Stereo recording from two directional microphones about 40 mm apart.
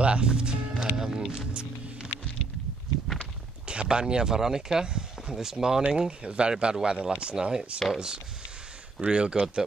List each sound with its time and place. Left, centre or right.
0.0 s speech: right
0.9 s speech: centre
1.5 s speech: right
3.6 s speech: right
5.9 s speech: right
9.0 s speech: right